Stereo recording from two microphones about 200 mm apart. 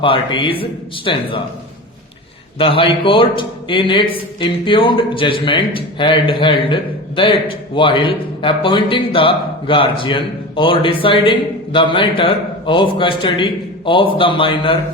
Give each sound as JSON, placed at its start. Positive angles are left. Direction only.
{"t": 0.0, "sound": "a man's voice", "side_deg": 25}
{"t": 2.6, "sound": "a man's voice", "side_deg": 25}